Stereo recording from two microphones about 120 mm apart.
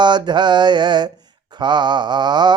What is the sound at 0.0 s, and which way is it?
Mantra, 40° right (ahead or behind).